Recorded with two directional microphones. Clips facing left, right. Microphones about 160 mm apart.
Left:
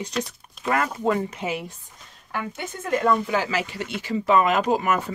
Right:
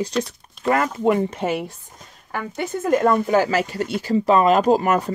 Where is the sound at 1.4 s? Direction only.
45° right (ahead or behind).